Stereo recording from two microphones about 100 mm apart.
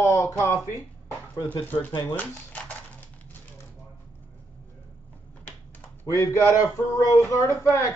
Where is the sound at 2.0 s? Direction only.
15° left (ahead or behind).